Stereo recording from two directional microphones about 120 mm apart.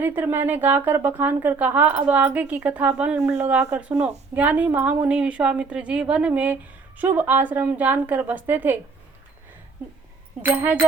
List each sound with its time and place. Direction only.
0.0 s a woman's voice: 15° right (ahead or behind)
10.4 s a woman's voice: 15° right (ahead or behind)